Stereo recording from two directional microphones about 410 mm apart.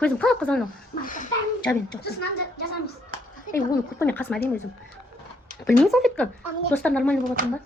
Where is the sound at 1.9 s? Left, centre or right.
Centre.